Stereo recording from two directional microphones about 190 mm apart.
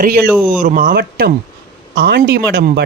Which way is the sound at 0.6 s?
45° right (ahead or behind).